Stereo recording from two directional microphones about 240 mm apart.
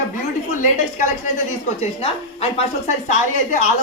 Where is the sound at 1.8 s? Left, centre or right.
Left.